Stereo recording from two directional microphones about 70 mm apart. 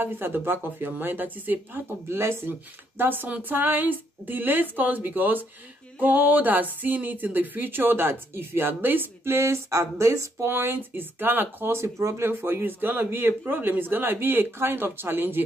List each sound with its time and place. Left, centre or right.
0.0 s speech: right
10.5 s speech: right